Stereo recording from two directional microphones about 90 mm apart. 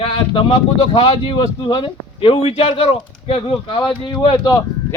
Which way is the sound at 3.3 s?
75° left (ahead or behind).